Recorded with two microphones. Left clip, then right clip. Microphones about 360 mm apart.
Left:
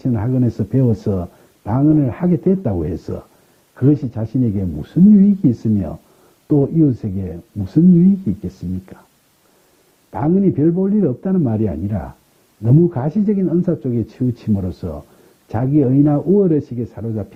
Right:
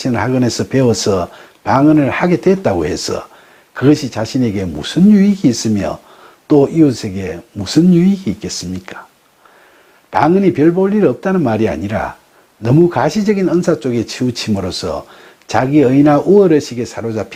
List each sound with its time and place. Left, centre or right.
0.0 s speech: centre
6.5 s speech: centre
10.1 s speech: centre